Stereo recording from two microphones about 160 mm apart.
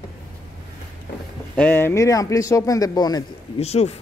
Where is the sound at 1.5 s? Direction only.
10° left (ahead or behind).